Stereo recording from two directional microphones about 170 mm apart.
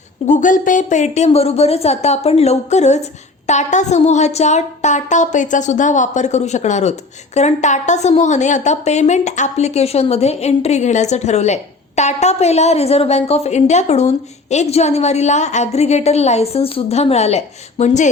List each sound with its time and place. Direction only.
0.3 s a woman's voice: 50° left (ahead or behind)